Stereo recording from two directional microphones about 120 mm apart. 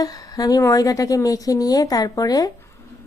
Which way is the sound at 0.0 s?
30° left (ahead or behind).